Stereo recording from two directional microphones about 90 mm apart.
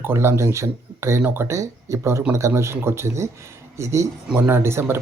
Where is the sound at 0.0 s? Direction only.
25° right (ahead or behind).